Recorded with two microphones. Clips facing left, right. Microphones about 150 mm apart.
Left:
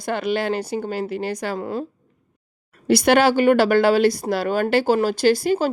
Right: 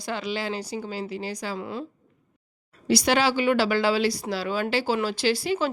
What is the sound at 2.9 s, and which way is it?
Speech, 55° left (ahead or behind).